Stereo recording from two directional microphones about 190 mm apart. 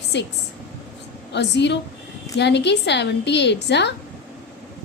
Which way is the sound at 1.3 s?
65° left (ahead or behind).